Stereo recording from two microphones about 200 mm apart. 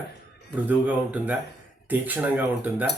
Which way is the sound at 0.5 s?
10° right (ahead or behind).